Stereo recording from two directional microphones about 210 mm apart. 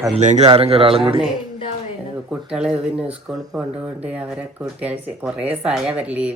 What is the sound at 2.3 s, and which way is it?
Speech, 5° right (ahead or behind).